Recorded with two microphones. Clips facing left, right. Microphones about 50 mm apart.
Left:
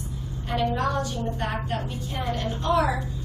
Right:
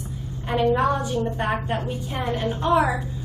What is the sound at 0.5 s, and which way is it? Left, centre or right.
A woman's voice, right.